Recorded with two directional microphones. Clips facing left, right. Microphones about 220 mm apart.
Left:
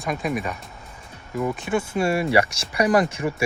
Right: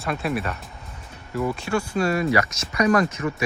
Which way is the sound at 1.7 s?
20° left (ahead or behind).